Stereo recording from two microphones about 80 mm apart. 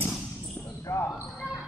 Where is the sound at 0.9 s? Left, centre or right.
Left.